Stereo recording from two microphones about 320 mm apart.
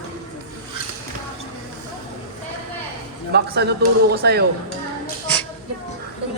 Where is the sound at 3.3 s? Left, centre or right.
Right.